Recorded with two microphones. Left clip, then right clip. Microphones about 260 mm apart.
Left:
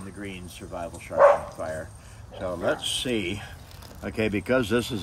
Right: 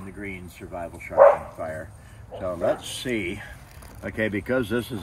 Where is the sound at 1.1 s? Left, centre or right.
Centre.